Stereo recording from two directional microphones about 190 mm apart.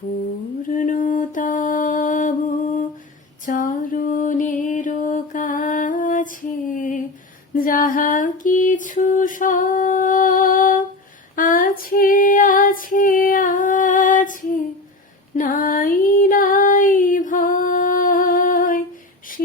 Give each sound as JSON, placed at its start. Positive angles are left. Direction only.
{"t": 0.6, "sound": "mantra", "side_deg": 45}
{"t": 3.4, "sound": "music", "side_deg": 45}
{"t": 6.7, "sound": "a sound", "side_deg": 45}
{"t": 11.3, "sound": "female singing", "side_deg": 45}
{"t": 15.4, "sound": "female singing", "side_deg": 45}